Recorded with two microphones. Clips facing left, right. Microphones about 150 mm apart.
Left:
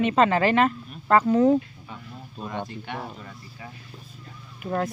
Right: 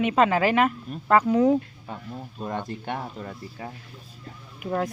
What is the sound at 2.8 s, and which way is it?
Speech, 45° right (ahead or behind).